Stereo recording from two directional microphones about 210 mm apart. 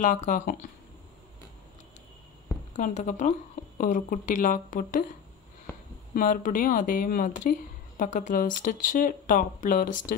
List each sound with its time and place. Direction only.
0.0 s speech: 35° left (ahead or behind)
2.7 s speech: 35° left (ahead or behind)
6.1 s speech: 40° left (ahead or behind)